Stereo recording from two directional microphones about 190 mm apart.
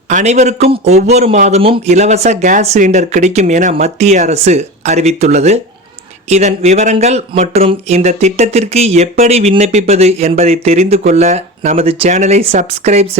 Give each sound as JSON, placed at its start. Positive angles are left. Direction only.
{"t": 0.1, "sound": "speech", "side_deg": -40}